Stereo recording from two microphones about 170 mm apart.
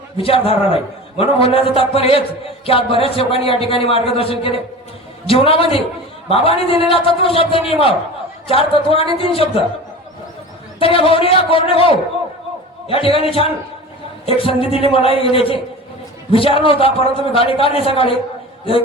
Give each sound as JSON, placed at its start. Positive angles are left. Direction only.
{"t": 0.2, "sound": "a man's voice", "side_deg": 35}
{"t": 10.8, "sound": "a man's voice", "side_deg": 30}